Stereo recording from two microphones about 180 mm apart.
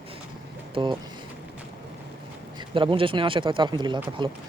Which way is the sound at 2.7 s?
30° right (ahead or behind).